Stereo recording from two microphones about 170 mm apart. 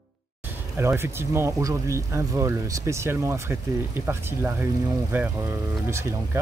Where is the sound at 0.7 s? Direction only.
15° right (ahead or behind).